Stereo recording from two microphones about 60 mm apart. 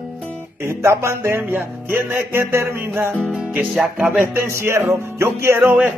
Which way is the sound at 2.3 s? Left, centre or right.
Right.